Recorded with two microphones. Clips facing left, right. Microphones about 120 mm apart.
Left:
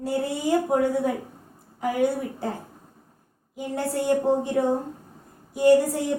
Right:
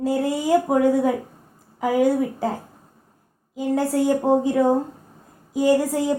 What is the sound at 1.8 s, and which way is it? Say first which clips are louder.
Speech: right 5 dB; 90° right.